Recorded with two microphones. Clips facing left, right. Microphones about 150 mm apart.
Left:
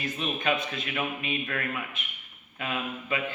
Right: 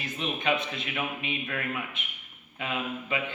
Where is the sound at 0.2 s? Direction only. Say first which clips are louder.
Right 1 dB; 20° right (ahead or behind).